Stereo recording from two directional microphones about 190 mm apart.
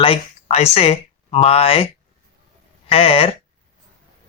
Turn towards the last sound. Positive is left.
turn(degrees=30)  # may be behind; listen again after turning